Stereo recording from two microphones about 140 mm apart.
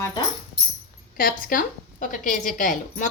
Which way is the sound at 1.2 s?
90° left.